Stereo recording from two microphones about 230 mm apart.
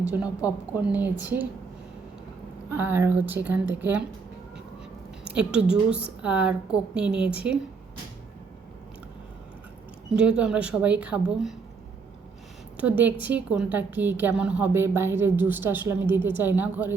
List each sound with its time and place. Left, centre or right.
0.0 s a woman's voice: centre
2.6 s a woman's voice: centre
5.3 s a woman's voice: centre
10.2 s a woman's voice: centre
12.7 s a woman's voice: centre